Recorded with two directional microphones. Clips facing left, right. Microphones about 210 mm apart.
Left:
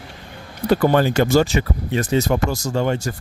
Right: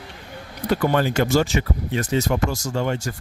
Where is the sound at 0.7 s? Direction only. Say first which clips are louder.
Left 4 dB; 35° left (ahead or behind).